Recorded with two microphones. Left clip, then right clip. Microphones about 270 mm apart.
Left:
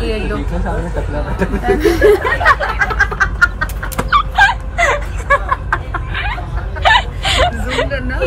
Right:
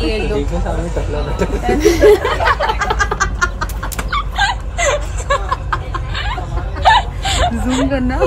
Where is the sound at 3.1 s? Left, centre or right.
Right.